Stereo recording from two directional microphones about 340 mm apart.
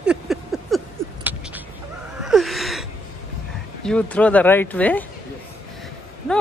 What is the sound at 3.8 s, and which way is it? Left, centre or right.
Speech, centre.